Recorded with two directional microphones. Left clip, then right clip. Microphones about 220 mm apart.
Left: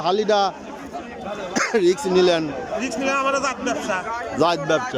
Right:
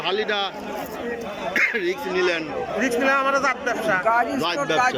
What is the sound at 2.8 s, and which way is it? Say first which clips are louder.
A man's voice: right 2 dB; 5° left (ahead or behind).